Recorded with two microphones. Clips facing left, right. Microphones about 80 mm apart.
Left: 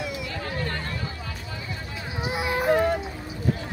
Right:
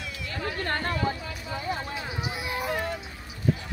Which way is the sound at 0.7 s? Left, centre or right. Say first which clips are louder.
Right 4 dB; right.